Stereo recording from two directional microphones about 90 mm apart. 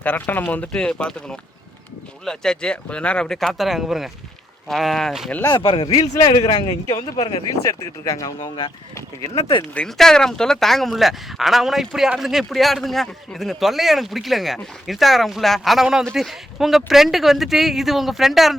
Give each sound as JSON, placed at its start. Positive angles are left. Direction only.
{"t": 0.0, "sound": "speech", "side_deg": 20}
{"t": 5.5, "sound": "a man's voice", "side_deg": 70}
{"t": 7.6, "sound": "speech", "side_deg": 35}
{"t": 9.7, "sound": "speech", "side_deg": 5}